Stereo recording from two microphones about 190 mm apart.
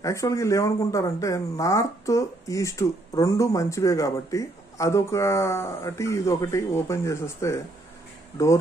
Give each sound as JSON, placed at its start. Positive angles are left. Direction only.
{"t": 0.0, "sound": "speech", "side_deg": 15}